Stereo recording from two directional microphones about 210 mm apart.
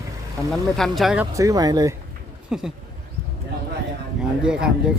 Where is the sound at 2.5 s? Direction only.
5° right (ahead or behind).